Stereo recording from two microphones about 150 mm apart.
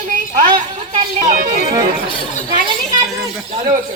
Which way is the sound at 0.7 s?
50° right (ahead or behind).